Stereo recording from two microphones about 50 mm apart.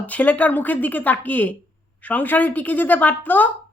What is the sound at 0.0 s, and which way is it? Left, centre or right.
A woman's voice, left.